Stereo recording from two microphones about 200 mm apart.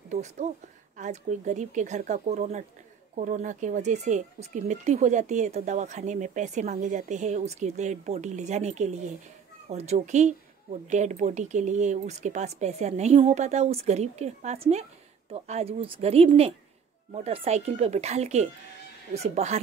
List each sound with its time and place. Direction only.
0.1 s speech: 35° right (ahead or behind)